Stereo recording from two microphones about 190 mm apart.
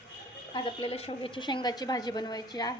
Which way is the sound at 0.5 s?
30° left (ahead or behind).